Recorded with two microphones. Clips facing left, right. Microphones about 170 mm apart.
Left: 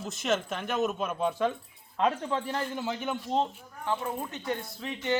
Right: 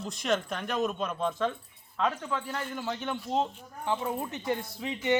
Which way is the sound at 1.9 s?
25° left (ahead or behind).